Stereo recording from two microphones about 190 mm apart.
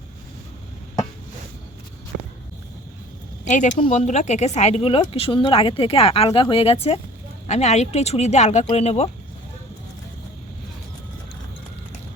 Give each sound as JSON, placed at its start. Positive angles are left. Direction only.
{"t": 3.4, "sound": "speech", "side_deg": 40}